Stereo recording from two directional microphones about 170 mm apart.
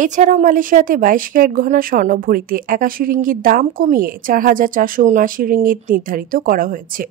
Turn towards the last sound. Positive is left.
turn(degrees=-55)  # may be behind; listen again after turning